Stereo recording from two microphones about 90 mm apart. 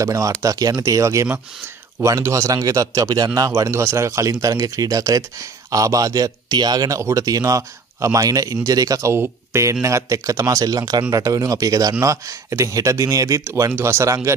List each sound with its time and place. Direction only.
0.0 s speech: 40° right (ahead or behind)
7.0 s speech: 35° right (ahead or behind)